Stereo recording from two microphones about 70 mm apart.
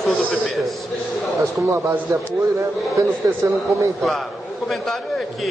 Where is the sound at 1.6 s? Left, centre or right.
Right.